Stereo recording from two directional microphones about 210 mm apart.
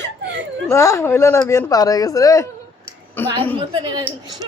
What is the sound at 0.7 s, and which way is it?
Speech, 15° left (ahead or behind).